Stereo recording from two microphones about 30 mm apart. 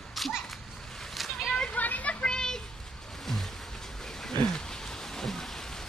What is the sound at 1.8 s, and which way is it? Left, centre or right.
Children playing, left.